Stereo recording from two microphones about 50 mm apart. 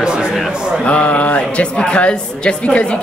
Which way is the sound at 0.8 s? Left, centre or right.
Left.